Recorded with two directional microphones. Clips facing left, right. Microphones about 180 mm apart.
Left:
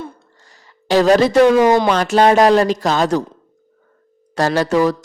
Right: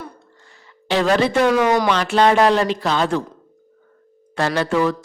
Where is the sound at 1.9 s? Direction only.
40° left (ahead or behind).